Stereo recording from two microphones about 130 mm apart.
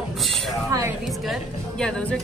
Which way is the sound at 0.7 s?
25° right (ahead or behind).